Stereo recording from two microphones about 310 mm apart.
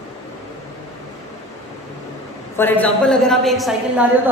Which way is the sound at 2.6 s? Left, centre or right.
Centre.